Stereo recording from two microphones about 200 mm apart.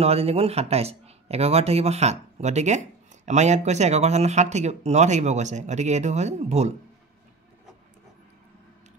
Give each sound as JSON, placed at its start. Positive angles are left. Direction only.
{"t": 0.0, "sound": "speech", "side_deg": -30}